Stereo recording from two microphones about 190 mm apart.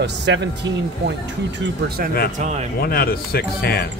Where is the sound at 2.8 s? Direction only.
50° left (ahead or behind).